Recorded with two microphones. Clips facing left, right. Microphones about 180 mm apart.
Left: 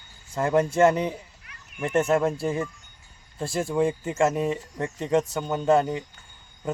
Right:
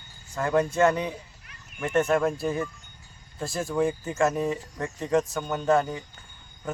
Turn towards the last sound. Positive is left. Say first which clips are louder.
# left 2 dB
turn(degrees=25)  # may be behind; listen again after turning